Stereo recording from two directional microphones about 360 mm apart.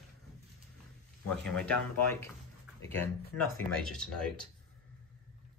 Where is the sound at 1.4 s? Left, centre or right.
Centre.